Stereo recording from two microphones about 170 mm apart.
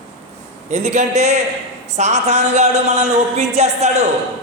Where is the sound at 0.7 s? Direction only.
40° right (ahead or behind).